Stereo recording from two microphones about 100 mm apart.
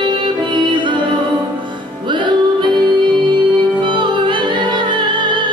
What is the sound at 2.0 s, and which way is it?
Music, 50° right (ahead or behind).